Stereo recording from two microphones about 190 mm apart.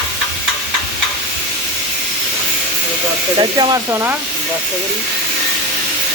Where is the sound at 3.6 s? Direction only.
15° right (ahead or behind).